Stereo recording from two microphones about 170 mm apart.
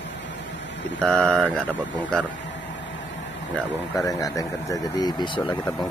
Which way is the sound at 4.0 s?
20° left (ahead or behind).